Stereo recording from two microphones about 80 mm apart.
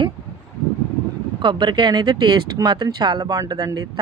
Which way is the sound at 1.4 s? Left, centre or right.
Right.